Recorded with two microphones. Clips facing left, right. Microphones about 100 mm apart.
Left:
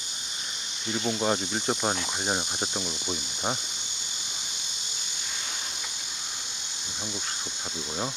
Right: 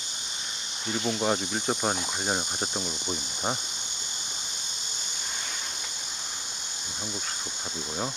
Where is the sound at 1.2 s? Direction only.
10° right (ahead or behind).